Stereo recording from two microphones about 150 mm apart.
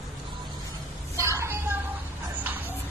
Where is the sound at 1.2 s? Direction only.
20° right (ahead or behind).